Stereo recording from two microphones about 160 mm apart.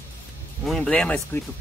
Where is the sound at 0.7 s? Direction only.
5° left (ahead or behind).